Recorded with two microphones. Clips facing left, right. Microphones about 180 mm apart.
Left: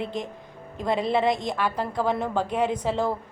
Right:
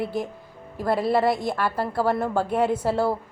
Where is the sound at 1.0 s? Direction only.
20° left (ahead or behind).